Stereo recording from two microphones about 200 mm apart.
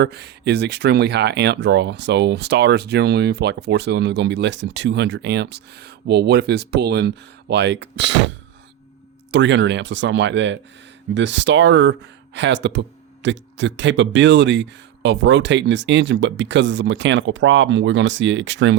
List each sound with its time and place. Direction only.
0.0 s speech: 55° right (ahead or behind)
9.3 s speech: 65° right (ahead or behind)